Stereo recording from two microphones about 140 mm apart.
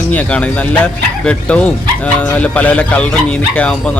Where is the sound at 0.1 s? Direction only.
10° left (ahead or behind).